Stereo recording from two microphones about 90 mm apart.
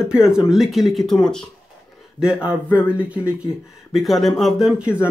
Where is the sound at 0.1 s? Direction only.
10° right (ahead or behind).